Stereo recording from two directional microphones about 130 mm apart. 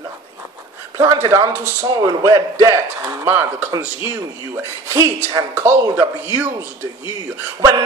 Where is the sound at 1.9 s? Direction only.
30° right (ahead or behind).